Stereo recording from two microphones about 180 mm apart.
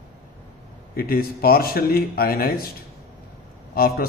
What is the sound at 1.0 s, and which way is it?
A man's voice, 55° left (ahead or behind).